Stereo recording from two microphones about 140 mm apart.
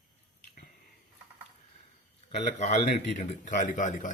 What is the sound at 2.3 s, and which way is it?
A man's voice, 55° left (ahead or behind).